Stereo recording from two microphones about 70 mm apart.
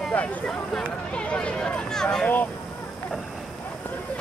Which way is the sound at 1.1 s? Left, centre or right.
Centre.